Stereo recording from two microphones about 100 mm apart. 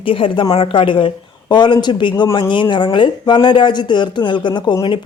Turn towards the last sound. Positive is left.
turn(degrees=50)  # may be behind; listen again after turning